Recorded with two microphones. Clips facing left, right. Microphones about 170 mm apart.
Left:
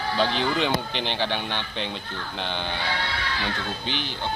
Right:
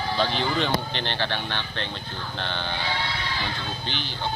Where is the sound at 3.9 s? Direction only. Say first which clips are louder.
Left 3 dB; 50° left (ahead or behind).